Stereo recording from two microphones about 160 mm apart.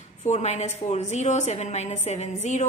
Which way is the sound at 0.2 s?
45° left (ahead or behind).